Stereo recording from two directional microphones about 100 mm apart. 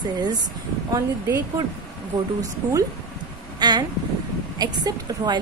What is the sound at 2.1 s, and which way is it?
Speech, 45° right (ahead or behind).